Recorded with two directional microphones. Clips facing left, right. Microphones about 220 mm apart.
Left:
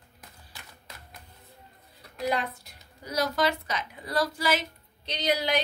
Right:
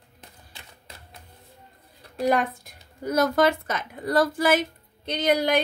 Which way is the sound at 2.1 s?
50° right (ahead or behind).